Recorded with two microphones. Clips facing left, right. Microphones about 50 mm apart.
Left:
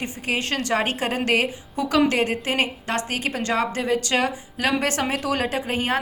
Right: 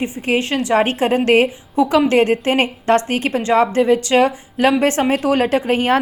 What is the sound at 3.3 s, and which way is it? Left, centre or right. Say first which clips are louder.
A woman's voice: right 9 dB; right.